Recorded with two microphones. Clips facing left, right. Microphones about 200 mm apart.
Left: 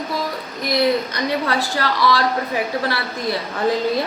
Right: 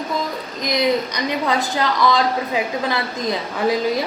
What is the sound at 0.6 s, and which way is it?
A woman's voice, 15° right (ahead or behind).